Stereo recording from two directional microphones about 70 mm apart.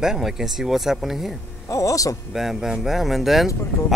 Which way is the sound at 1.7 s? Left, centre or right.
Left.